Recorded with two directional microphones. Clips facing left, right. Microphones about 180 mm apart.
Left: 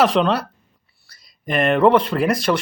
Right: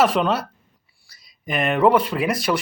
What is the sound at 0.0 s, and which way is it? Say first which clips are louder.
Speech: left 2 dB; 5° right (ahead or behind).